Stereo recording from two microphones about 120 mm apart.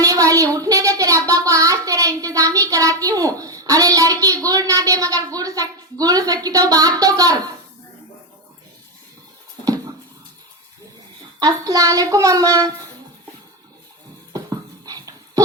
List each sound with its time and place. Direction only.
0.0 s a child's voice: 30° right (ahead or behind)
9.6 s a sound: 30° right (ahead or behind)
11.3 s a woman's voice: 30° right (ahead or behind)
14.3 s dog: 30° right (ahead or behind)